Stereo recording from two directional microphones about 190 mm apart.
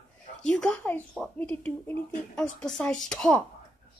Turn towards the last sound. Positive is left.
turn(degrees=5)  # may be behind; listen again after turning